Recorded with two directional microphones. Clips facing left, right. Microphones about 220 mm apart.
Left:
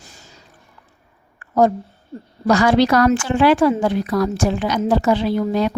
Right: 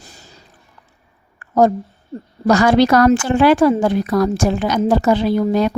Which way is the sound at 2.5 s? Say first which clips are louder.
Right 2 dB; 45° right (ahead or behind).